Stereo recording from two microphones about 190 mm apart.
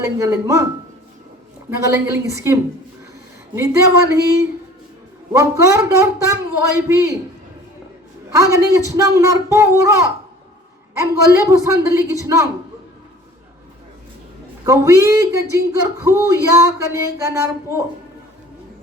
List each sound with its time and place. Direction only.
0.2 s a man's voice: 15° right (ahead or behind)
1.9 s a man's voice: 15° right (ahead or behind)
8.3 s a man's voice: 15° right (ahead or behind)
11.2 s a man's voice: 15° right (ahead or behind)
14.7 s a man's voice: 15° right (ahead or behind)